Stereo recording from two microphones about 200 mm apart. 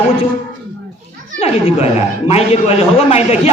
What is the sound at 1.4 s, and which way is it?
A man's voice, 30° left (ahead or behind).